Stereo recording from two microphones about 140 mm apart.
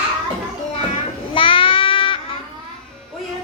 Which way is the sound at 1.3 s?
40° left (ahead or behind).